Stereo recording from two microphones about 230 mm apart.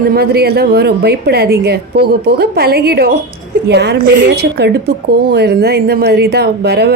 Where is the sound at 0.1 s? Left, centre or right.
Right.